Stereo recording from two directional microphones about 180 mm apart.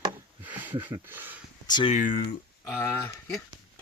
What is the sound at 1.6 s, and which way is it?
Speech, 25° left (ahead or behind).